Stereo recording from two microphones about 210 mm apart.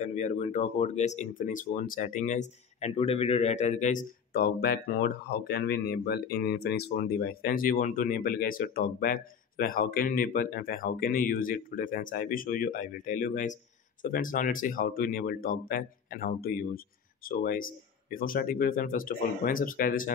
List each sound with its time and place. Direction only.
0.0 s speech: 35° left (ahead or behind)